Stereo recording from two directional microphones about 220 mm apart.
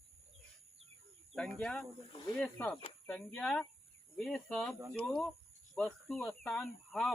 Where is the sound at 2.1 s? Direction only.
20° left (ahead or behind).